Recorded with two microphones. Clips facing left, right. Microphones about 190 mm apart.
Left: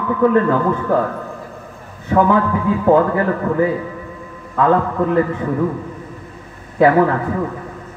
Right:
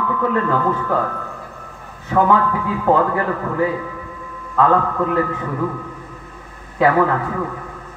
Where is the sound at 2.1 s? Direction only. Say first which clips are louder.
Left 2 dB; 40° left (ahead or behind).